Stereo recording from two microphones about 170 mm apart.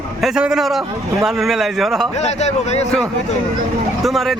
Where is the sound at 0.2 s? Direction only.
5° right (ahead or behind).